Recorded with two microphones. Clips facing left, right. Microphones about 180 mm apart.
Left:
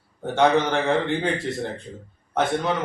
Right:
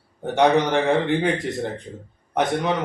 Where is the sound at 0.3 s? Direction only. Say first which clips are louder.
Right 2 dB; 15° right (ahead or behind).